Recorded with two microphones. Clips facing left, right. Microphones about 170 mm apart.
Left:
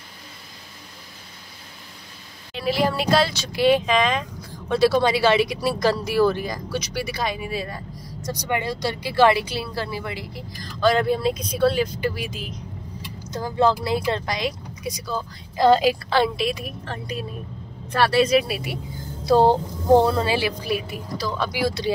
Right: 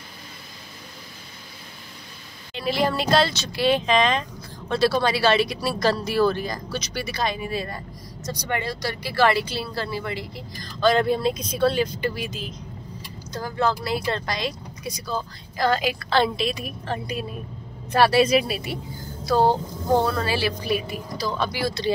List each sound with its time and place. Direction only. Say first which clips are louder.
2.5 s speech: left 1 dB; 5° left (ahead or behind)
15.5 s a woman's voice: left 6 dB; 25° left (ahead or behind)
16.1 s speech: left 1 dB; 10° left (ahead or behind)
16.8 s a woman's voice: right 4 dB; 5° right (ahead or behind)
19.2 s speech: left 3 dB; 25° left (ahead or behind)
20.6 s speech: right 1 dB; 5° left (ahead or behind)